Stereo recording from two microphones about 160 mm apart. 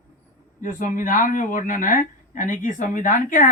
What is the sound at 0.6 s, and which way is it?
Speech, 55° left (ahead or behind).